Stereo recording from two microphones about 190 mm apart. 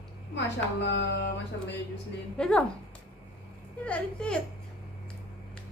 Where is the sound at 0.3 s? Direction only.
65° left (ahead or behind).